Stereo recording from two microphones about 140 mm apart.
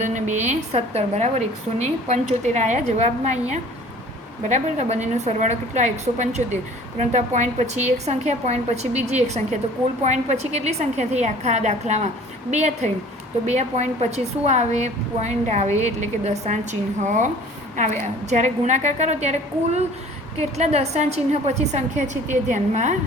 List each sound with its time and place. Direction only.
0.0 s a woman's voice: 60° right (ahead or behind)